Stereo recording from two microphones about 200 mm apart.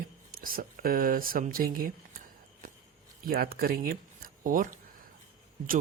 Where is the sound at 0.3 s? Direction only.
45° right (ahead or behind).